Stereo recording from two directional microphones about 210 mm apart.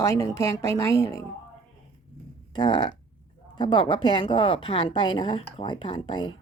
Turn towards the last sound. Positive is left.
turn(degrees=20)  # may be behind; listen again after turning